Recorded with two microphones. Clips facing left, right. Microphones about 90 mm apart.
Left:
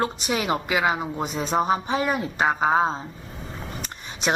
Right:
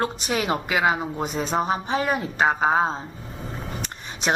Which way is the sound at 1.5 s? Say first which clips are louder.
Left 2 dB; 5° right (ahead or behind).